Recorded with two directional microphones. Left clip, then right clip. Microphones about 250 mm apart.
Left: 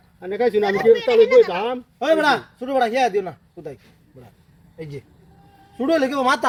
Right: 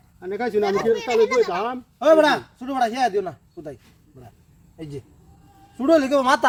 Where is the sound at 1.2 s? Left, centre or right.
Right.